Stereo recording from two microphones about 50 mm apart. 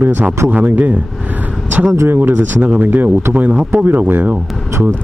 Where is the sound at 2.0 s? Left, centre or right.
Right.